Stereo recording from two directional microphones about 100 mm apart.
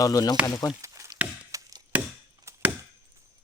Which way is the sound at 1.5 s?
35° right (ahead or behind).